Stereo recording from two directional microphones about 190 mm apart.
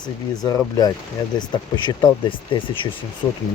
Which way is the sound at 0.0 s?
20° left (ahead or behind).